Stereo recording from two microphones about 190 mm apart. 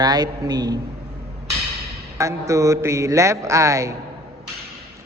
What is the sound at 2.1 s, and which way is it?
A man's voice, 15° right (ahead or behind).